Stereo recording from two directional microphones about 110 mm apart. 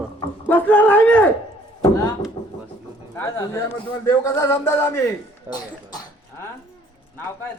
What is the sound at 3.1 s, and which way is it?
Speech, 25° left (ahead or behind).